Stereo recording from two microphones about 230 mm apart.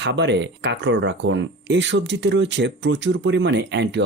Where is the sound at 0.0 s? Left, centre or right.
Right.